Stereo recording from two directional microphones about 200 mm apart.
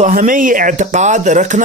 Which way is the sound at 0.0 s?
40° right (ahead or behind).